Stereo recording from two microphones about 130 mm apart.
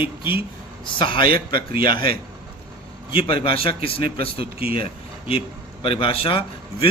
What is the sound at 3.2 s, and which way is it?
A man's voice, 45° left (ahead or behind).